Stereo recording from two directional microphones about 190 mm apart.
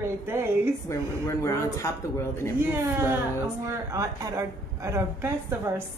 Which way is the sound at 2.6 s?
10° right (ahead or behind).